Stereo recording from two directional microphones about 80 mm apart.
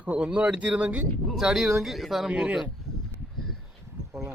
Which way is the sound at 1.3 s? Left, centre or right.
Centre.